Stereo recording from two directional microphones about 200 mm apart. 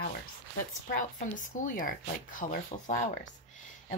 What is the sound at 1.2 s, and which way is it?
Speech, 40° left (ahead or behind).